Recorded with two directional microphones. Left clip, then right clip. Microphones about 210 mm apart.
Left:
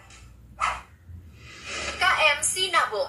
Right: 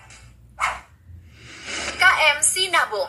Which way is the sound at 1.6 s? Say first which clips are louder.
Right 6 dB; 30° right (ahead or behind).